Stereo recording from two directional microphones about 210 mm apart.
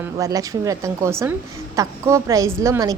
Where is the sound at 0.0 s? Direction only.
15° right (ahead or behind).